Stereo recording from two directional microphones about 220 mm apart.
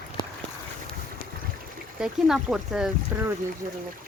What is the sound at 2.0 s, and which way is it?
Speech, centre (ahead or behind).